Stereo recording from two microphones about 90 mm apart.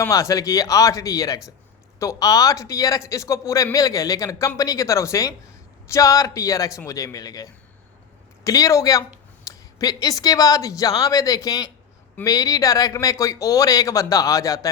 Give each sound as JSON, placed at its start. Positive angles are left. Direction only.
{"t": 0.0, "sound": "a man's voice", "side_deg": 35}